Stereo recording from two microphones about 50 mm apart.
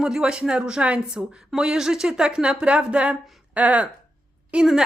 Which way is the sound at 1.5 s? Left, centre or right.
Centre.